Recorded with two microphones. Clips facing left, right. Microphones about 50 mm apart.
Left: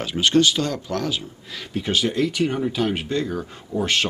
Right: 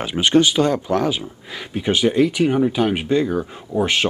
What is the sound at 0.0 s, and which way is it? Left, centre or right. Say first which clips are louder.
Speech: right 2 dB; right.